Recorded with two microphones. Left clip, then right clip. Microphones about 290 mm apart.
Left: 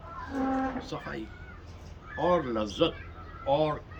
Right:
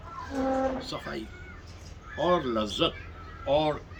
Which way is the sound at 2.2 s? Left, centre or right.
Centre.